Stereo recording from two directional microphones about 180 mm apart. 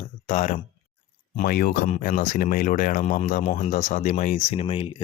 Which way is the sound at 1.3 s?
50° left (ahead or behind).